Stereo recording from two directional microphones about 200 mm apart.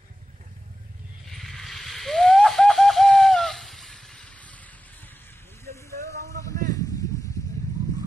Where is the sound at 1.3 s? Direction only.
Centre (ahead or behind).